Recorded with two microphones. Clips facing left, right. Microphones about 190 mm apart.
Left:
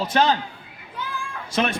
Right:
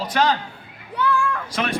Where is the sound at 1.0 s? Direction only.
65° right (ahead or behind).